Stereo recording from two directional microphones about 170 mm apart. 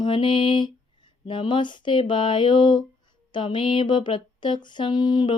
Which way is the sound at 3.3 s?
30° left (ahead or behind).